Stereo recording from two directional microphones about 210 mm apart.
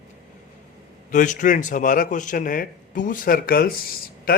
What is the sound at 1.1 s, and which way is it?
A man's voice, 35° left (ahead or behind).